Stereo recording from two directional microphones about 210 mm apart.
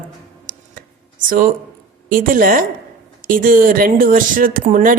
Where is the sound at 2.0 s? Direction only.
40° right (ahead or behind).